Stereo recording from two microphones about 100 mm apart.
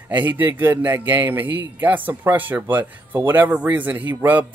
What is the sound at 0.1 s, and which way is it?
Speech, 15° right (ahead or behind).